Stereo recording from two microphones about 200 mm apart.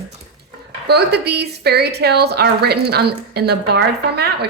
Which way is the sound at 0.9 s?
55° right (ahead or behind).